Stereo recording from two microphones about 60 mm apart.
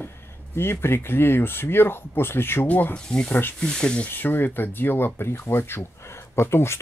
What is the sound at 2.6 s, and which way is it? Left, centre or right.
Speech, left.